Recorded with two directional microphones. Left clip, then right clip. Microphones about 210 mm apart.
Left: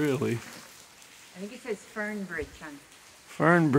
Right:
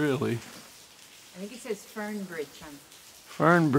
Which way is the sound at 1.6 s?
45° right (ahead or behind).